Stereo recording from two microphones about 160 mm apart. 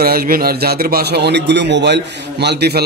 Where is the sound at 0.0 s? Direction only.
70° right (ahead or behind).